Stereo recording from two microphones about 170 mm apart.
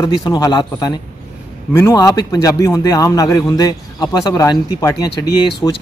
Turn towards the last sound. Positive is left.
turn(degrees=20)  # may be behind; listen again after turning